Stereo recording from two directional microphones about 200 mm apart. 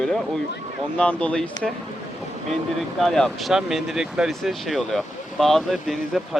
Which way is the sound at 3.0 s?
Centre (ahead or behind).